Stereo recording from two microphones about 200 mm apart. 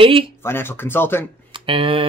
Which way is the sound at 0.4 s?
10° left (ahead or behind).